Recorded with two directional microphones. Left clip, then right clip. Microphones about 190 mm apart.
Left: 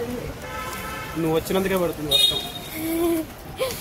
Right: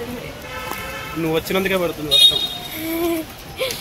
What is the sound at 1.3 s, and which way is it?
Speech, centre (ahead or behind).